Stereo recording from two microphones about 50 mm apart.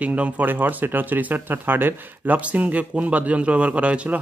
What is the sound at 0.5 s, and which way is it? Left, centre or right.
Speech, right.